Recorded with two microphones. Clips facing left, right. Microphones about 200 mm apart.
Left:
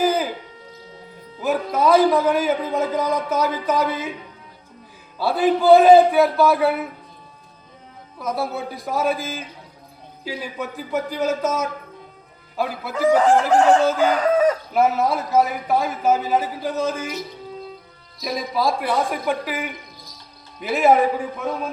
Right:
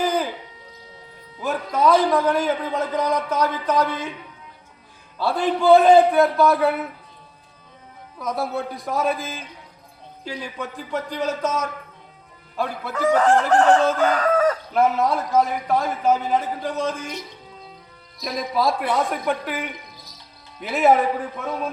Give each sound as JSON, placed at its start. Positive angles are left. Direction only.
{"t": 0.0, "sound": "a sound", "side_deg": 5}
{"t": 1.4, "sound": "a man's voice", "side_deg": 5}
{"t": 5.2, "sound": "a man's voice", "side_deg": 5}
{"t": 8.2, "sound": "a man's voice", "side_deg": 0}
{"t": 14.3, "sound": "livestock", "side_deg": 15}
{"t": 14.8, "sound": "a man's voice", "side_deg": 5}